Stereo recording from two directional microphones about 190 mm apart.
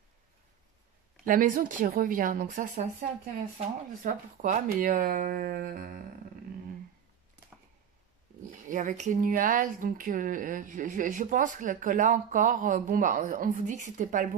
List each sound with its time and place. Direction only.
1.2 s speech: 45° right (ahead or behind)
8.4 s speech: 45° right (ahead or behind)